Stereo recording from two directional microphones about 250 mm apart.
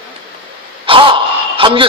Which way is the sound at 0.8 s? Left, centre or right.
Right.